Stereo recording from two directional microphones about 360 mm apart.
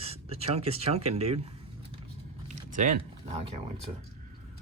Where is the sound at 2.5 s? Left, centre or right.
Right.